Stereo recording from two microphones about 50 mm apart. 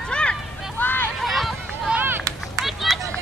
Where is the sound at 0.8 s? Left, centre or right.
Left.